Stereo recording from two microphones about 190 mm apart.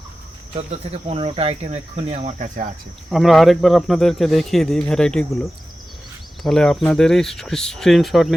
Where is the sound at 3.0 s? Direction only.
Centre (ahead or behind).